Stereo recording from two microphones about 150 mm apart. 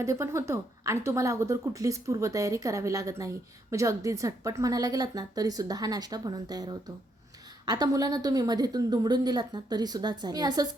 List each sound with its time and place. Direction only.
0.0 s speech: 20° right (ahead or behind)